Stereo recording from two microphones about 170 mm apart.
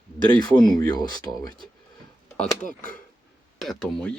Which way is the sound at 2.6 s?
50° left (ahead or behind).